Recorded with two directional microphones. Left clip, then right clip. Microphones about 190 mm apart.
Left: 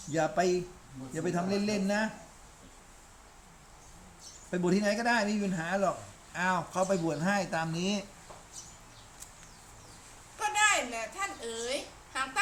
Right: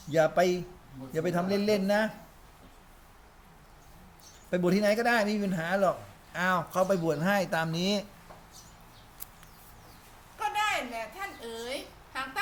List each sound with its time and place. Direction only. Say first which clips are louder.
0.1 s speech: right 4 dB; 40° right (ahead or behind)
4.5 s speech: right 4 dB; 40° right (ahead or behind)
10.3 s babbling: left 2 dB; 15° left (ahead or behind)